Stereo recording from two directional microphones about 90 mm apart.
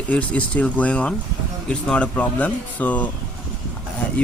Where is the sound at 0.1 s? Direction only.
15° left (ahead or behind).